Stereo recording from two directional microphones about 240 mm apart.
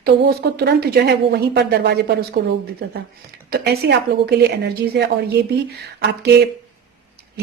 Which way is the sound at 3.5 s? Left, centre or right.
Right.